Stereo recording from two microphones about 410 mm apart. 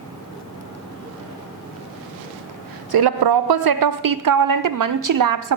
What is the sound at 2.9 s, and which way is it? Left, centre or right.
A woman's voice, right.